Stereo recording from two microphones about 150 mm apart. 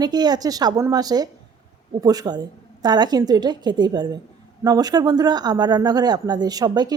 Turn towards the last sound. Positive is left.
turn(degrees=-25)  # may be behind; listen again after turning